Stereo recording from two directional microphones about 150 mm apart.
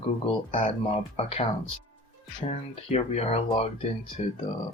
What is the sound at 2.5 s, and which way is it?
Speech, 45° left (ahead or behind).